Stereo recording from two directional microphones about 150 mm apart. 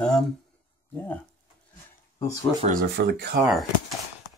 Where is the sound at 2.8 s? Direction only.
90° right.